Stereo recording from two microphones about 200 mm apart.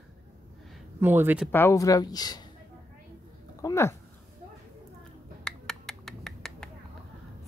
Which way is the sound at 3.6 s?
15° left (ahead or behind).